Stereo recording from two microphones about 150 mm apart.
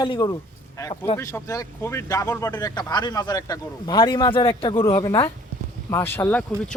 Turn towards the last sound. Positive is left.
turn(degrees=5)  # may be behind; listen again after turning